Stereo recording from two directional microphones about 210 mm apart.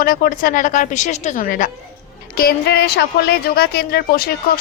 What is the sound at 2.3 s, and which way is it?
Speech, 50° left (ahead or behind).